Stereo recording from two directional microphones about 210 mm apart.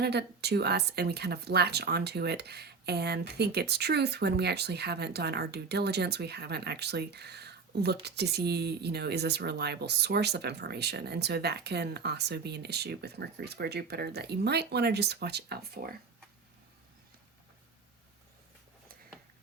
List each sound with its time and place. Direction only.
0.0 s speech: 50° right (ahead or behind)